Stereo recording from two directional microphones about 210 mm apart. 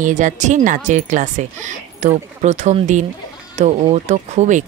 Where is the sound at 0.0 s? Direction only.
35° right (ahead or behind).